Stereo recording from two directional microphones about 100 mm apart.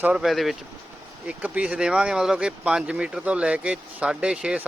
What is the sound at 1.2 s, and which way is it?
Speech, 15° right (ahead or behind).